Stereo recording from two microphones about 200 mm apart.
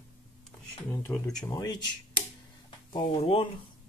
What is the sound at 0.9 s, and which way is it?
Speech, 10° left (ahead or behind).